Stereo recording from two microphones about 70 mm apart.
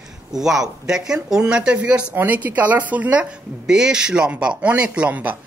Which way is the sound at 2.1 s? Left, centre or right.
Right.